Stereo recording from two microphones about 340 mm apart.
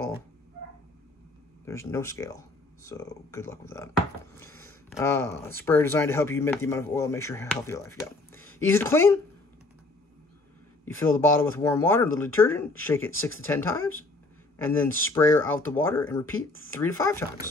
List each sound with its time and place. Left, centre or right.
1.7 s speech: centre
10.9 s speech: centre